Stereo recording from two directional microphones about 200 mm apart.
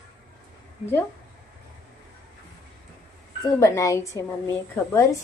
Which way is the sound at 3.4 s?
15° left (ahead or behind).